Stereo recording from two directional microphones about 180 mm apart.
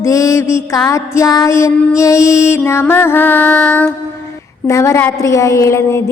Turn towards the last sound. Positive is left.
turn(degrees=15)  # may be behind; listen again after turning